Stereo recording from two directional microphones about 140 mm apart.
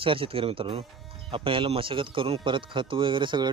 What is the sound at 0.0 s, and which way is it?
Speech, 40° right (ahead or behind).